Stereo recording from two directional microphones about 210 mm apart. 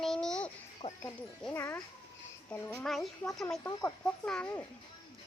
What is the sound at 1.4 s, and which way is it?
Speech, 10° left (ahead or behind).